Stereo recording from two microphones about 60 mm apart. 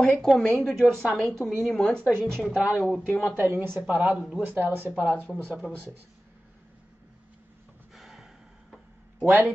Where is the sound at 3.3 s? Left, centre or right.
Right.